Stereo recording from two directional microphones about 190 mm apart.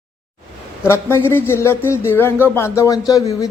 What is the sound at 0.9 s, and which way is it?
A man's voice, 10° left (ahead or behind).